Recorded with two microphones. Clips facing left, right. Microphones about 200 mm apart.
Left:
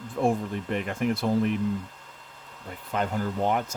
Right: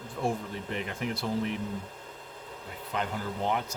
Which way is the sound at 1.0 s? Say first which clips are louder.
Left 8 dB; 50° left (ahead or behind).